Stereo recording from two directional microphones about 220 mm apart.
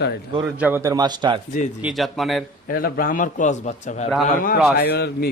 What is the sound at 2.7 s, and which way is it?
A man's voice, 40° left (ahead or behind).